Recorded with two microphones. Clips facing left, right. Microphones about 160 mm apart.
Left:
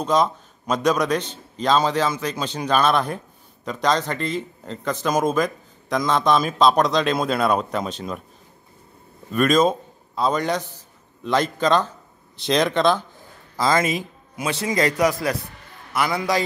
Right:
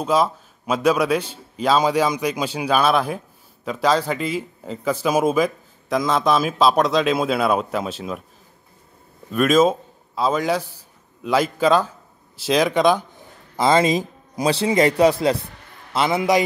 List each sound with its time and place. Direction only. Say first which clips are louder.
0.0 s a man's voice: right 1 dB; 5° right (ahead or behind)
9.3 s a man's voice: right 2 dB; 5° right (ahead or behind)
13.6 s speech: right 4 dB; 25° right (ahead or behind)
13.9 s speech: right 5 dB; 35° right (ahead or behind)